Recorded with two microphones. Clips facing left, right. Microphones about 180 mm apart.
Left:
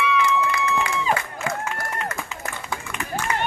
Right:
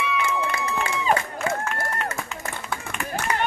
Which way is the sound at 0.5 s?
25° right (ahead or behind).